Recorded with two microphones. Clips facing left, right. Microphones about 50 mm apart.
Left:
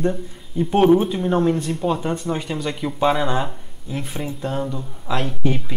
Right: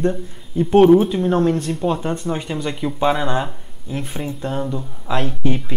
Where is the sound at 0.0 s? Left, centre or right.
Centre.